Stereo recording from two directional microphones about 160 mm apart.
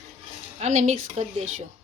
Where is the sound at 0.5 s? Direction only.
45° right (ahead or behind).